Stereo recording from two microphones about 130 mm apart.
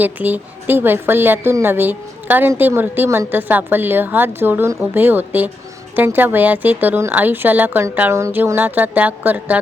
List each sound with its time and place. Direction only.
0.0 s a woman's voice: 15° right (ahead or behind)